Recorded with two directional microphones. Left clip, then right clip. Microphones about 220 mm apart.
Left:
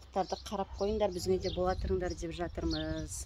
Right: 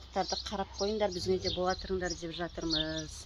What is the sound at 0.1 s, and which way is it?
Speech, 25° left (ahead or behind).